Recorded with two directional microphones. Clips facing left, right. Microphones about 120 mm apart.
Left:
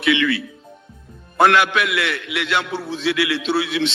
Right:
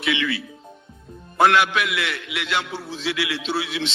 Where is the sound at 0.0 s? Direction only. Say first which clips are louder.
Left 6 dB; 65° left (ahead or behind).